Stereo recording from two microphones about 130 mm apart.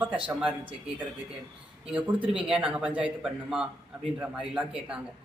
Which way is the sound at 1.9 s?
10° right (ahead or behind).